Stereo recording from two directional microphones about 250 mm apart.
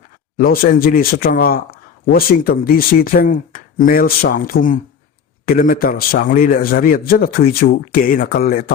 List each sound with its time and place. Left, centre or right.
0.3 s a man's voice: left